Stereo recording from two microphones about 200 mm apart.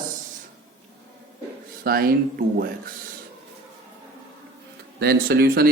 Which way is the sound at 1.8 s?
50° right (ahead or behind).